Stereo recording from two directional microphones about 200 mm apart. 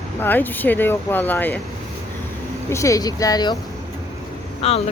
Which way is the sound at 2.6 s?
15° left (ahead or behind).